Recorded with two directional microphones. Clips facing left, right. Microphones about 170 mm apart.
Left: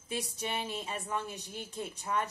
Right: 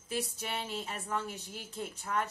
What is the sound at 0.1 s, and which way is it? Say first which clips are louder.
Speech: even; 15° left (ahead or behind).